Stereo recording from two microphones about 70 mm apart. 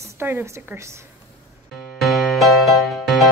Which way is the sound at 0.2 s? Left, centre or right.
Right.